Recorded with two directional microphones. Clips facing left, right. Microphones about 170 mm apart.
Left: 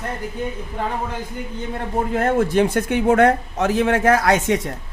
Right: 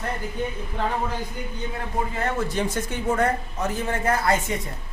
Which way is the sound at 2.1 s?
50° left (ahead or behind).